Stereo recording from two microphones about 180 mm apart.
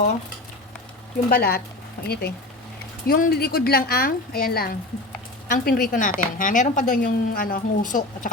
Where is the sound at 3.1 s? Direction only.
50° left (ahead or behind).